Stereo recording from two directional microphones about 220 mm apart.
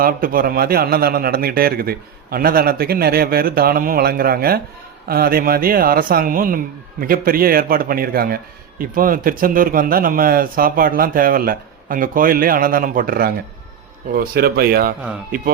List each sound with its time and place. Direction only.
0.0 s a man's voice: 40° right (ahead or behind)